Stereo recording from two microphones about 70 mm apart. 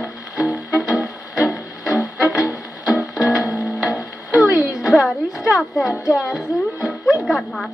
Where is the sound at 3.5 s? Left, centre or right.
Left.